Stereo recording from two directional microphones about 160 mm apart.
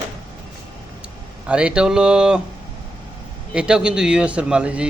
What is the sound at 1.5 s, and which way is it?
Speech, 5° right (ahead or behind).